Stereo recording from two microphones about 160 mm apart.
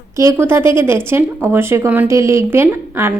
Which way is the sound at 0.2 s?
15° right (ahead or behind).